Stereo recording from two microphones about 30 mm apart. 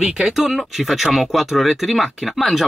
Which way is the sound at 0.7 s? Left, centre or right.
Centre.